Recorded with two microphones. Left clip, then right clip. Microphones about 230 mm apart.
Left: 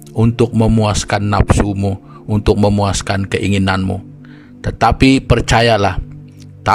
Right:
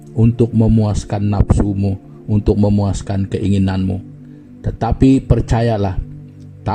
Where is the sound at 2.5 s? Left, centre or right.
Left.